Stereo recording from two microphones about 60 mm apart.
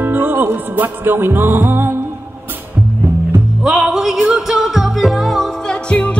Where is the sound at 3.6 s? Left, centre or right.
Centre.